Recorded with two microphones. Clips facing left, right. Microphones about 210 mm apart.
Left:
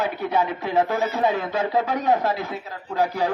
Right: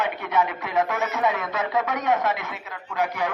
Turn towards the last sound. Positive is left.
turn(degrees=35)  # may be behind; listen again after turning